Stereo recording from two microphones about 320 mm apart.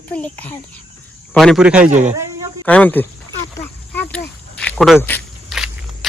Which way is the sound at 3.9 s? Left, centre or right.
Centre.